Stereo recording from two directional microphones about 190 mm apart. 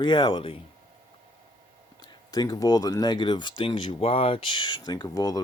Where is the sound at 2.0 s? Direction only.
20° left (ahead or behind).